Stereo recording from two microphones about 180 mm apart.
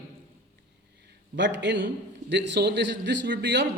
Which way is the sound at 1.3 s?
80° right.